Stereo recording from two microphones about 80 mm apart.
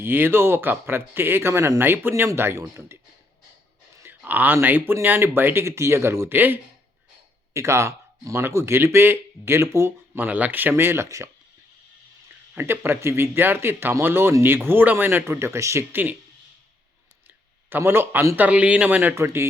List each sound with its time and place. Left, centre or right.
0.0 s speech: right
4.0 s speech: right
7.5 s speech: right
10.2 s speech: right
12.5 s speech: right
17.7 s speech: right
18.3 s speech: centre
19.1 s speech: right